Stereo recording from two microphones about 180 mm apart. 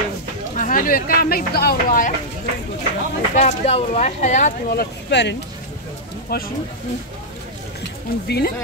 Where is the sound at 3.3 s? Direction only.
40° left (ahead or behind).